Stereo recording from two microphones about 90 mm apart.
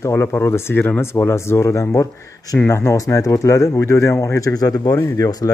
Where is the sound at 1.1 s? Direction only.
30° left (ahead or behind).